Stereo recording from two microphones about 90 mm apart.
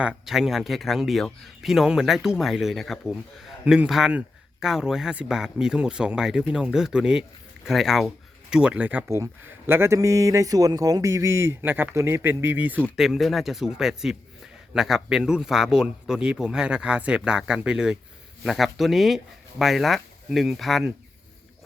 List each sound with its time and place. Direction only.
0.0 s speech: 10° right (ahead or behind)
3.6 s a man's voice: 15° right (ahead or behind)
9.0 s speech: 30° right (ahead or behind)
13.0 s speech: centre (ahead or behind)